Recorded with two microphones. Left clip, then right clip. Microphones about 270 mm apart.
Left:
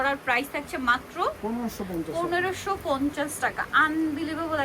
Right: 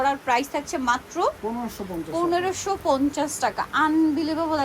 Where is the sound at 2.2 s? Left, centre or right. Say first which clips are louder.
Right 3 dB; centre.